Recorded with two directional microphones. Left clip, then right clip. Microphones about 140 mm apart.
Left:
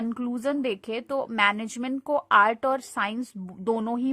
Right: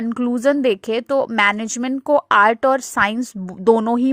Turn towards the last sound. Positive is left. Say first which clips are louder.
# right 12 dB
turn(degrees=-50)  # may be behind; listen again after turning